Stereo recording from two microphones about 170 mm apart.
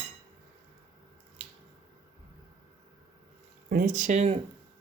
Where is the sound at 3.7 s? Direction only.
50° right (ahead or behind).